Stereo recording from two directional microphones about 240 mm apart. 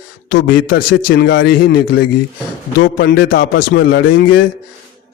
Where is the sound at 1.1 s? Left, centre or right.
Left.